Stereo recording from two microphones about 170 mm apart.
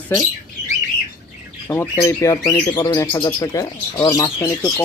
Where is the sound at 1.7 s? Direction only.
15° left (ahead or behind).